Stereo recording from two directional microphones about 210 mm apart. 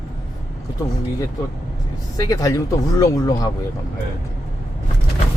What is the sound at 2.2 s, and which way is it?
Speech, 15° left (ahead or behind).